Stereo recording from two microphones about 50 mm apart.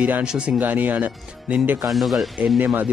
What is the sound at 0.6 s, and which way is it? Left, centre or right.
Speech, right.